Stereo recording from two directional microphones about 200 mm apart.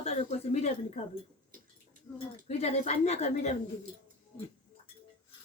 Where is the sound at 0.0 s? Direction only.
30° left (ahead or behind).